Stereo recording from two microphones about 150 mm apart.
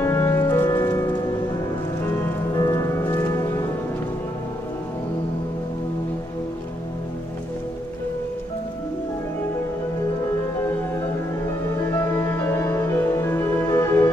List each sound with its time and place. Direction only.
0.0 s music: 15° left (ahead or behind)
2.5 s music: 20° left (ahead or behind)
11.9 s music: 15° left (ahead or behind)